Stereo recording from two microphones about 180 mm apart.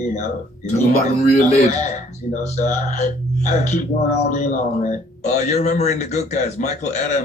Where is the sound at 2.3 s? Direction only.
40° left (ahead or behind).